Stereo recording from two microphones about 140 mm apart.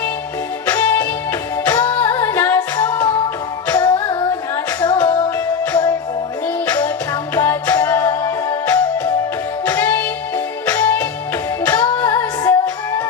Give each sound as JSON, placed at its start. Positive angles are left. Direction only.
{"t": 0.7, "sound": "music", "side_deg": 20}
{"t": 6.7, "sound": "music", "side_deg": 25}